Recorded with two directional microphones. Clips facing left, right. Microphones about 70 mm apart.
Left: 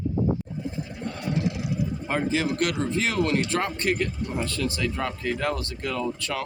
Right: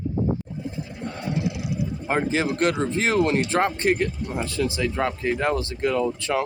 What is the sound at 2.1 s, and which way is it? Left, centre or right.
Speech, right.